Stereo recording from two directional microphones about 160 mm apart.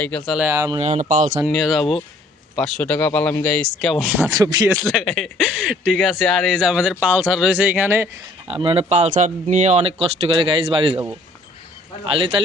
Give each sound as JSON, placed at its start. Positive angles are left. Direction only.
{"t": 0.4, "sound": "speech", "side_deg": -20}
{"t": 0.8, "sound": "speech", "side_deg": -45}
{"t": 1.5, "sound": "speech", "side_deg": 0}
{"t": 4.2, "sound": "speech", "side_deg": -25}
{"t": 4.7, "sound": "speech", "side_deg": 0}
{"t": 8.4, "sound": "speech", "side_deg": -35}